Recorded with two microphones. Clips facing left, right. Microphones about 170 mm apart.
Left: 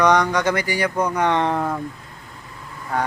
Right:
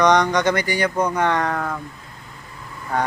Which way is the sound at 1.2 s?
20° left (ahead or behind).